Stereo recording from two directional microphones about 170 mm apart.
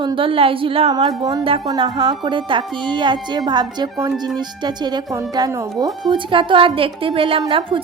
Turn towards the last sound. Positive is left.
turn(degrees=-30)  # may be behind; listen again after turning